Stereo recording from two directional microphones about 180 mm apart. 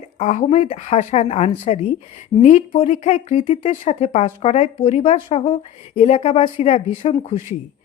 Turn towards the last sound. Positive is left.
turn(degrees=30)  # may be behind; listen again after turning